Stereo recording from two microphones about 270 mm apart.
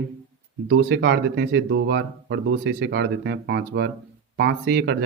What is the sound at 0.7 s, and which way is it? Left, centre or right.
Speech, right.